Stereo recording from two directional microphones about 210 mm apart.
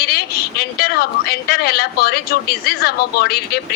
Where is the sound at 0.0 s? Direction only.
45° left (ahead or behind).